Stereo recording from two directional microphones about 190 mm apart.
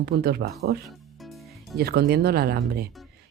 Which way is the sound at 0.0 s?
55° right (ahead or behind).